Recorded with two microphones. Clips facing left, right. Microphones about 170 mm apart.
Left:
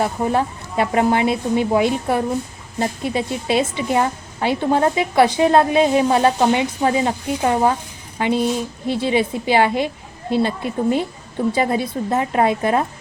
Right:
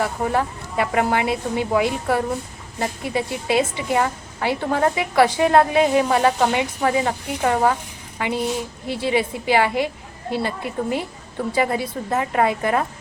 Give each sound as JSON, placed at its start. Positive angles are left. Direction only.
{"t": 0.0, "sound": "a woman's voice", "side_deg": 25}